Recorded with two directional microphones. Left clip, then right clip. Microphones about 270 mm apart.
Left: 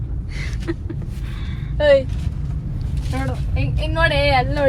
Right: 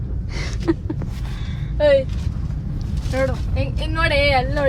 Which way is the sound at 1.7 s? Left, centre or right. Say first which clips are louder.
Left 1 dB; left.